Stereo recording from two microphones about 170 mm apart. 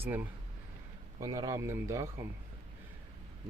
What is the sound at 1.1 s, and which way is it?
Speech, 20° right (ahead or behind).